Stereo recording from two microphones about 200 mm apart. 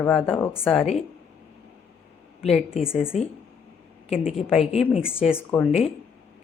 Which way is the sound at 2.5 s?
5° right (ahead or behind).